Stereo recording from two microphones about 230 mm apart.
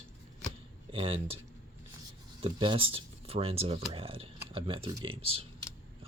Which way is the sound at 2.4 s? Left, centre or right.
Right.